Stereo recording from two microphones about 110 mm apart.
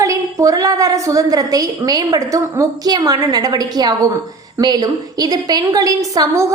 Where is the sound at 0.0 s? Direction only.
30° right (ahead or behind).